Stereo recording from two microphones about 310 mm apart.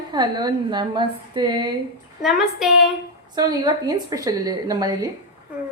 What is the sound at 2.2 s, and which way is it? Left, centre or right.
Speech, centre.